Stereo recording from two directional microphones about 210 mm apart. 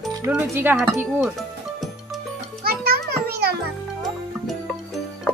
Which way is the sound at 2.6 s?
45° right (ahead or behind).